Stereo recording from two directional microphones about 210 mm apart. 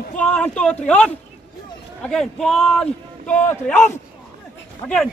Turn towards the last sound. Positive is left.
turn(degrees=5)  # may be behind; listen again after turning